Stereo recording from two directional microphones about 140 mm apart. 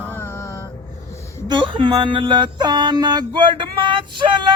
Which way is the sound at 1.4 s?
35° right (ahead or behind).